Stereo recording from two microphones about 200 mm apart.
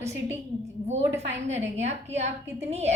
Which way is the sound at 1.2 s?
35° right (ahead or behind).